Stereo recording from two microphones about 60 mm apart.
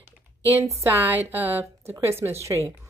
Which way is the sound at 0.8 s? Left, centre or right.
Right.